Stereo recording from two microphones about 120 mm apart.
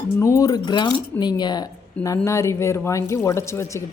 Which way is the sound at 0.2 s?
25° left (ahead or behind).